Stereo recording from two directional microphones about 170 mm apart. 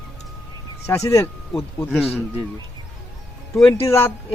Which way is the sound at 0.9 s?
15° left (ahead or behind).